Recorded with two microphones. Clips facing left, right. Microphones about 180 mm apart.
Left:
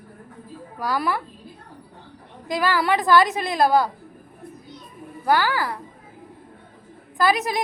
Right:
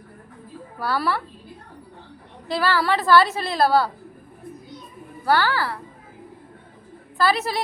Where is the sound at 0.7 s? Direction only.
15° left (ahead or behind).